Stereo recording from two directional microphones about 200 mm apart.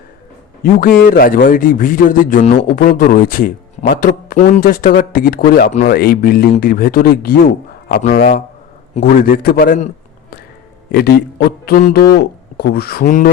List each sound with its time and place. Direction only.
0.6 s a man's voice: 45° left (ahead or behind)
10.9 s a man's voice: 55° left (ahead or behind)